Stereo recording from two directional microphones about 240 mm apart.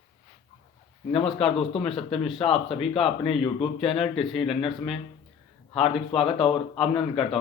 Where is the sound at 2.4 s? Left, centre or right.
Left.